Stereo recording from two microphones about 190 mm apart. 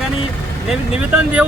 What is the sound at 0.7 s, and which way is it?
Speech, 5° right (ahead or behind).